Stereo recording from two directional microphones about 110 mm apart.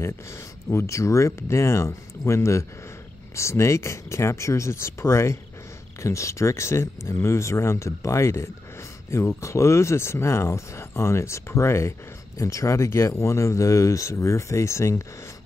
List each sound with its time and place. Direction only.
0.0 s speech: 25° left (ahead or behind)